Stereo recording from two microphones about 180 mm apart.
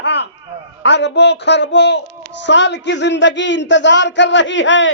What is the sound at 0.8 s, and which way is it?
A woman's voice, 75° left (ahead or behind).